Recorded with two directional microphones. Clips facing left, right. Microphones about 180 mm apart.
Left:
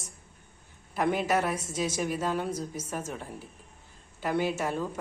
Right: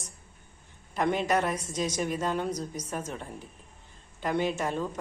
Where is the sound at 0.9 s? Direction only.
5° left (ahead or behind).